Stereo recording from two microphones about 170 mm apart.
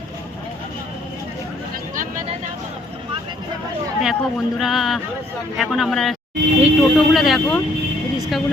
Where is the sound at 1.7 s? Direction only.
50° right (ahead or behind).